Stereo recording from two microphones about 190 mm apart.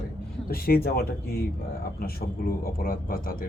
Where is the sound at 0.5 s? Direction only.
50° left (ahead or behind).